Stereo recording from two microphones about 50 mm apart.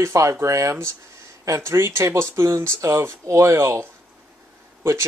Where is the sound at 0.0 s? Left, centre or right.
Right.